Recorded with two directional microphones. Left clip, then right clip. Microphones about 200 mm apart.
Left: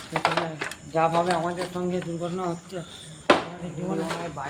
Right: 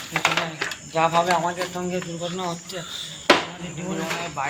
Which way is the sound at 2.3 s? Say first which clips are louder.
Right 2 dB; 50° left (ahead or behind).